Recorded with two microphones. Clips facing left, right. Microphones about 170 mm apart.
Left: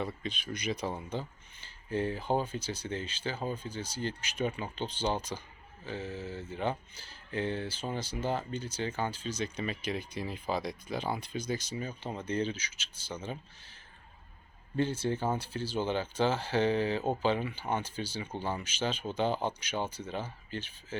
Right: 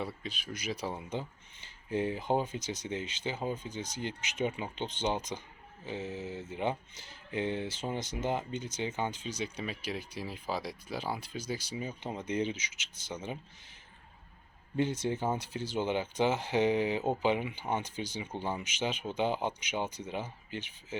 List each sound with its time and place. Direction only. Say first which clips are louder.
0.0 s speech: left 2 dB; 5° right (ahead or behind)
14.8 s speech: even; 15° right (ahead or behind)